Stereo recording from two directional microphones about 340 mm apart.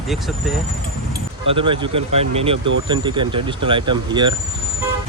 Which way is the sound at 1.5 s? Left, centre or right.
Centre.